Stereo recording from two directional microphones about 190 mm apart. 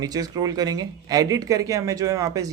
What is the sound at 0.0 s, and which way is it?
Speech, 20° right (ahead or behind).